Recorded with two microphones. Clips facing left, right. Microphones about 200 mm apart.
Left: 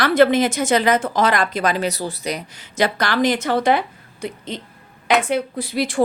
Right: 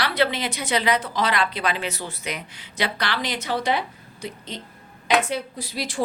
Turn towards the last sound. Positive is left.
turn(degrees=55)  # may be behind; listen again after turning